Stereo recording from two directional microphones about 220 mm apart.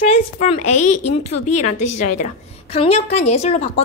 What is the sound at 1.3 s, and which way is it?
Speech, 90° left.